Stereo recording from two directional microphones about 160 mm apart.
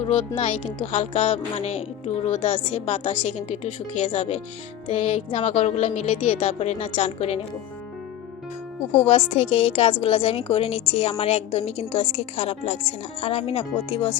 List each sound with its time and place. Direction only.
0.3 s a woman's voice: 35° left (ahead or behind)
4.0 s speech: 50° left (ahead or behind)
4.9 s a woman's voice: 35° left (ahead or behind)
9.0 s a woman's voice: 40° left (ahead or behind)